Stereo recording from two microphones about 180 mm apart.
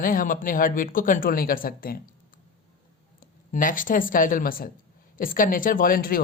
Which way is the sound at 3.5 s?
50° left (ahead or behind).